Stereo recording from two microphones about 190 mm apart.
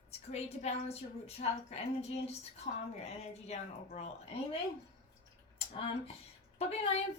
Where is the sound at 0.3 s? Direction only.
35° left (ahead or behind).